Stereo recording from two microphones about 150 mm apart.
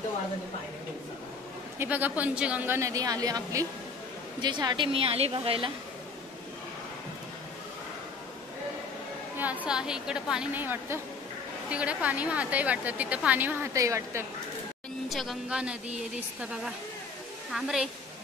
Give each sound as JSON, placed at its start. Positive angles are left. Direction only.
{"t": 1.8, "sound": "a woman's voice", "side_deg": -10}
{"t": 9.4, "sound": "a woman's voice", "side_deg": -10}
{"t": 15.0, "sound": "a woman's voice", "side_deg": 0}
{"t": 17.5, "sound": "a woman's voice", "side_deg": -5}